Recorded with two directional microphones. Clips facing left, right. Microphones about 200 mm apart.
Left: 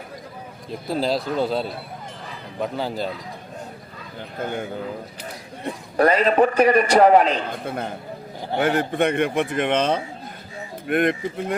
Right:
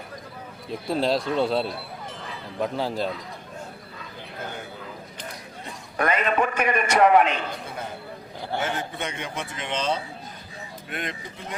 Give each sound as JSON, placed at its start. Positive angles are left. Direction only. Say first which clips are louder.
{"t": 0.7, "sound": "speech", "louder": "left 1 dB", "side_deg": 0}
{"t": 6.0, "sound": "a man's voice", "louder": "left 7 dB", "side_deg": 35}
{"t": 8.5, "sound": "a man's voice", "louder": "left 9 dB", "side_deg": 60}